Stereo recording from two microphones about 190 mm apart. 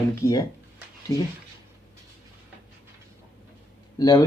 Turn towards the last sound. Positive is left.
turn(degrees=20)  # may be behind; listen again after turning